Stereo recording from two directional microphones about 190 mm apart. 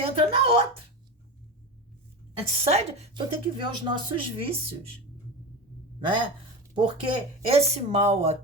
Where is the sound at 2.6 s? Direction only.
35° right (ahead or behind).